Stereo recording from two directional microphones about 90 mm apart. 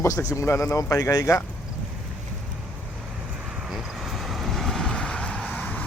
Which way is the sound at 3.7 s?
Centre (ahead or behind).